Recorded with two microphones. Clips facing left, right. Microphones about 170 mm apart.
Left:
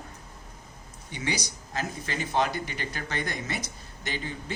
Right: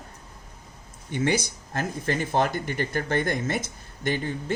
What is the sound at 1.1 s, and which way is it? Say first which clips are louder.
Speech: right 8 dB; 55° right (ahead or behind).